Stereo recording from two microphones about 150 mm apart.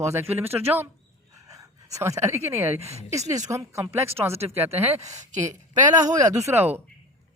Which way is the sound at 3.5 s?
20° right (ahead or behind).